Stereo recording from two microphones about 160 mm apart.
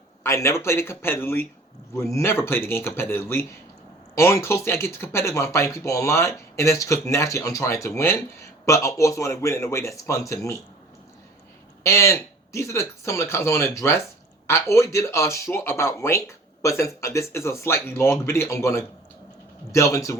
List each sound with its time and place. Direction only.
0.2 s speech: 15° left (ahead or behind)
11.8 s speech: 20° left (ahead or behind)